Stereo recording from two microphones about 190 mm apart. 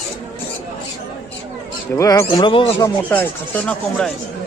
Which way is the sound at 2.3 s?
25° left (ahead or behind).